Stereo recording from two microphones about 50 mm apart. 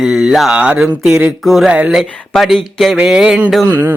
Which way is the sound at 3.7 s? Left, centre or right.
Right.